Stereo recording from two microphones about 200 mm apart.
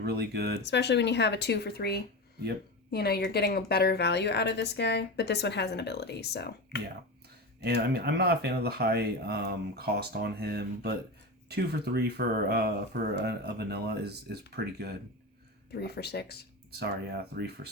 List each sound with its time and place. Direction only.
0.0 s speech: 55° right (ahead or behind)
0.6 s a woman's voice: 60° left (ahead or behind)
7.6 s speech: 55° right (ahead or behind)
15.7 s speech: 55° left (ahead or behind)
16.7 s speech: 55° right (ahead or behind)